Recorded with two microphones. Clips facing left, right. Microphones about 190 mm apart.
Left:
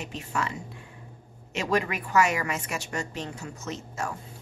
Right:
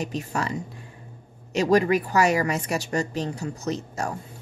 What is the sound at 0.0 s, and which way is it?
A woman's voice, 40° right (ahead or behind).